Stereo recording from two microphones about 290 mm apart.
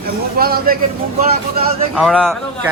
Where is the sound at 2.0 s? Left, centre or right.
Centre.